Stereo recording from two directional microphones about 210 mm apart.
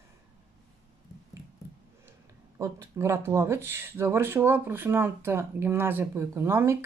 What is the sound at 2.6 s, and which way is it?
Speech, 15° right (ahead or behind).